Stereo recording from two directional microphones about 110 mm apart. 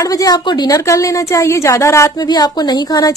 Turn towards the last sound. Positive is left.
turn(degrees=35)  # may be behind; listen again after turning